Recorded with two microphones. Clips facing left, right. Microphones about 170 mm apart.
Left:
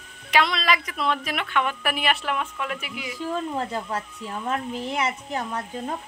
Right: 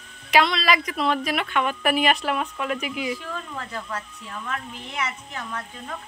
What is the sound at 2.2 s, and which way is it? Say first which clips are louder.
Speech: right 2 dB; 35° right (ahead or behind).